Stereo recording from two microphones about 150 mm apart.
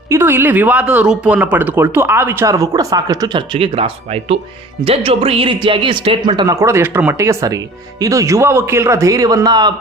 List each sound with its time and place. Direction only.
0.1 s speech: 15° right (ahead or behind)